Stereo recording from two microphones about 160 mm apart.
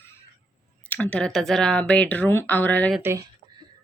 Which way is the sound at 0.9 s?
10° left (ahead or behind).